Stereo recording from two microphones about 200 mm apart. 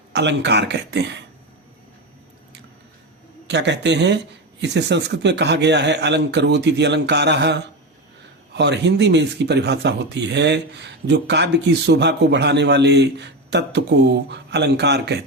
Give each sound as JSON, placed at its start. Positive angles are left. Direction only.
{"t": 0.1, "sound": "speech", "side_deg": -60}
{"t": 3.4, "sound": "speech", "side_deg": -60}